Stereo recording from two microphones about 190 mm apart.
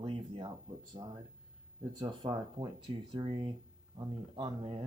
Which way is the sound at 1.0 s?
30° right (ahead or behind).